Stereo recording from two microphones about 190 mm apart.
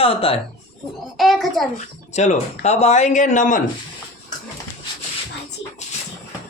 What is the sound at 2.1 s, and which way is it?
Speech, 35° left (ahead or behind).